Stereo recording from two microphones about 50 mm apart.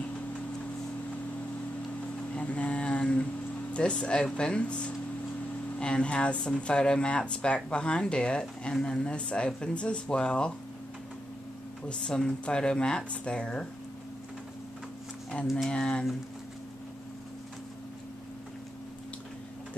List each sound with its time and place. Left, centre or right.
2.3 s a sound: left
3.7 s speech: left
11.9 s speech: centre
15.7 s speech: centre